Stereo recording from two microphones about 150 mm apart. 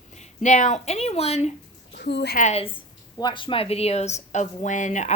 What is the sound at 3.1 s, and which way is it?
Speech, 30° left (ahead or behind).